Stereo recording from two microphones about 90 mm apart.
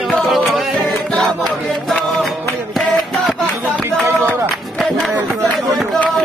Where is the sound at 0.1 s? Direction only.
Centre (ahead or behind).